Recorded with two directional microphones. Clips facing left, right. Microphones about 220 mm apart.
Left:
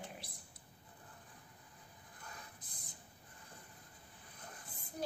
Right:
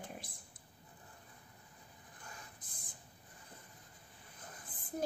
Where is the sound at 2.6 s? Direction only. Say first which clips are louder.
Even; 50° right (ahead or behind).